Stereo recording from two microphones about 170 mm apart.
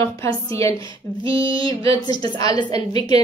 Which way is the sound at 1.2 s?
30° right (ahead or behind).